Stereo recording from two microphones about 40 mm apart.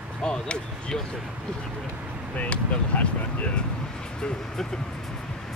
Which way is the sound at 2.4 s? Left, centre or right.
Left.